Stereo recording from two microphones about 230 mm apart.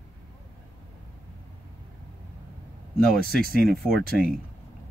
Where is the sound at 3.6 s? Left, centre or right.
Centre.